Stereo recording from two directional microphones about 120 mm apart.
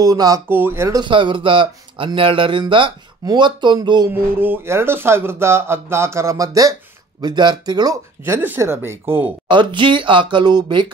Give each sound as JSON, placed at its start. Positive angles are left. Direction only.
{"t": 0.0, "sound": "speech", "side_deg": -30}
{"t": 0.5, "sound": "speech", "side_deg": -15}
{"t": 0.9, "sound": "speech", "side_deg": -40}
{"t": 4.1, "sound": "speech", "side_deg": -15}
{"t": 8.4, "sound": "speech", "side_deg": -20}
{"t": 9.5, "sound": "speech", "side_deg": -40}